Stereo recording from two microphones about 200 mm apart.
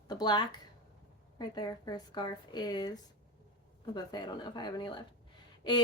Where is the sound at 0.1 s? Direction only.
20° left (ahead or behind).